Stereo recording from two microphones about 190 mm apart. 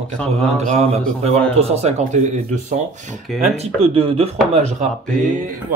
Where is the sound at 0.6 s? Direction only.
35° right (ahead or behind).